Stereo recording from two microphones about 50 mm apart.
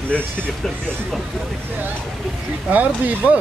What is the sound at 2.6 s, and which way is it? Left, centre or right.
Speech, right.